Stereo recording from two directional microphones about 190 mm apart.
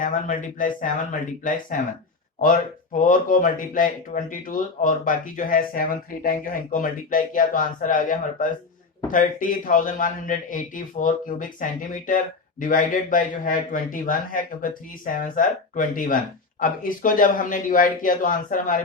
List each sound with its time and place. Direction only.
0.0 s a man's voice: 45° left (ahead or behind)
3.0 s a man's voice: 45° left (ahead or behind)